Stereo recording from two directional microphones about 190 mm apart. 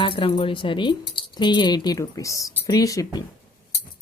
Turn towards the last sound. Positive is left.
turn(degrees=15)  # may be behind; listen again after turning